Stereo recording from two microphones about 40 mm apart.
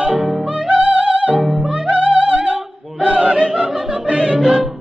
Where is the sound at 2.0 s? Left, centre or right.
Right.